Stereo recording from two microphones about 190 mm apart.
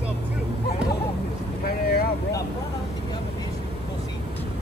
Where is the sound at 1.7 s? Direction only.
55° left (ahead or behind).